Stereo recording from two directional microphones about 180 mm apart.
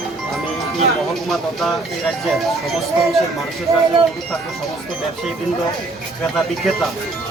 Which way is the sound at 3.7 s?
15° right (ahead or behind).